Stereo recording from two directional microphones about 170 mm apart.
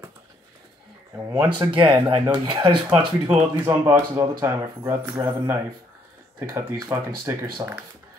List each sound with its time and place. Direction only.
1.1 s speech: 10° right (ahead or behind)
1.6 s speech: 30° right (ahead or behind)
2.9 s speech: 5° right (ahead or behind); by 7.8 s 25° right (ahead or behind)